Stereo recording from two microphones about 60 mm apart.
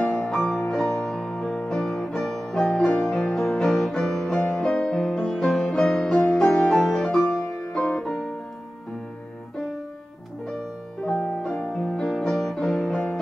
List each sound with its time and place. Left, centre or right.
0.0 s music: left
0.3 s music: centre
4.6 s music: centre
4.9 s music: centre
11.1 s music: centre